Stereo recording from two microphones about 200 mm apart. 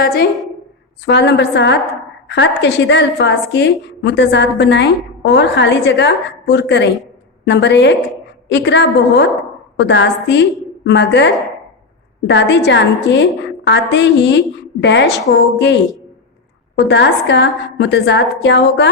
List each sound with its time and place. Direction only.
1.0 s a woman's voice: 60° left (ahead or behind)